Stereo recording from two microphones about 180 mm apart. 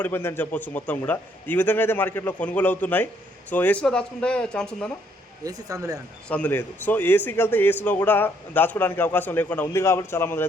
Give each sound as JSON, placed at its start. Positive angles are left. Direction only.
{"t": 0.0, "sound": "a man's voice", "side_deg": 15}
{"t": 5.4, "sound": "speech", "side_deg": -20}
{"t": 6.2, "sound": "a man's voice", "side_deg": 10}